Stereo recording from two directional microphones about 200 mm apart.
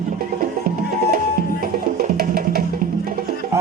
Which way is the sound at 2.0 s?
50° right (ahead or behind).